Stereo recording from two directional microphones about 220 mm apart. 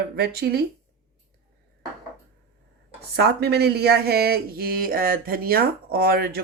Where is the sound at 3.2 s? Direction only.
45° right (ahead or behind).